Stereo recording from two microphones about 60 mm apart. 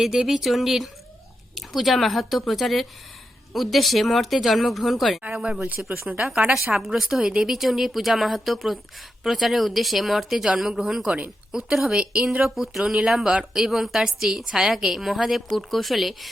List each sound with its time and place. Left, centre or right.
0.0 s a woman's voice: centre
5.3 s speech: centre
6.1 s a woman's voice: centre
12.5 s a woman's voice: centre